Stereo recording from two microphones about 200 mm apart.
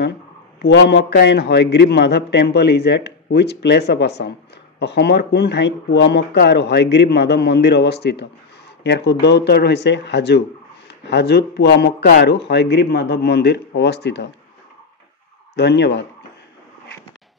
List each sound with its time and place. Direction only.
0.6 s a man's voice: 55° left (ahead or behind)
15.5 s a man's voice: 60° left (ahead or behind)